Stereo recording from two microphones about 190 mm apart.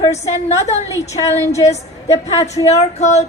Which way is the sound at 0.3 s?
35° left (ahead or behind).